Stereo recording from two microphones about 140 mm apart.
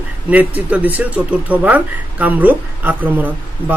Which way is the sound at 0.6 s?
10° right (ahead or behind).